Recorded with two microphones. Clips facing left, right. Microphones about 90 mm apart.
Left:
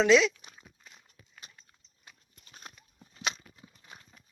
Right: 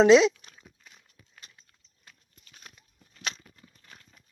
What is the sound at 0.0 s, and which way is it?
Speech, 30° right (ahead or behind).